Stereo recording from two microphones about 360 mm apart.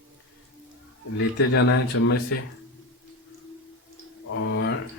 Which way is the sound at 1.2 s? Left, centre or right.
Left.